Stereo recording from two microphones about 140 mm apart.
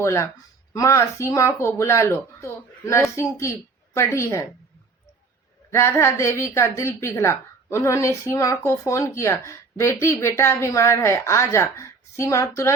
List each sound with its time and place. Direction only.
0.0 s a woman's voice: 20° left (ahead or behind)
5.7 s a woman's voice: 20° left (ahead or behind)